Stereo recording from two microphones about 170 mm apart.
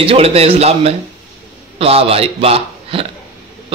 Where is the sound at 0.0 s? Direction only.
35° right (ahead or behind).